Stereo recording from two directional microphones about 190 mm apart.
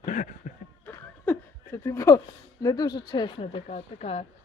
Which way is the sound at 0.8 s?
10° left (ahead or behind).